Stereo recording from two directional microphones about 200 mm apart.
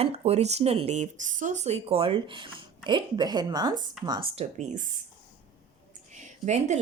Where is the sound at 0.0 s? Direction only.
30° right (ahead or behind).